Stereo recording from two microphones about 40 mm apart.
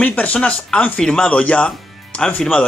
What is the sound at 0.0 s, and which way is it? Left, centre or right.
Speech, left.